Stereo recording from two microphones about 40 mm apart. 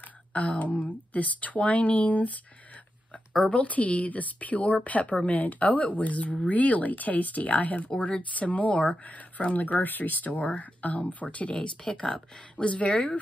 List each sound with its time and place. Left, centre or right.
0.3 s speech: left
3.4 s speech: left